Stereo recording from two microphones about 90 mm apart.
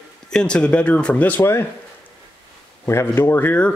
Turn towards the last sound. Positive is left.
turn(degrees=20)  # may be behind; listen again after turning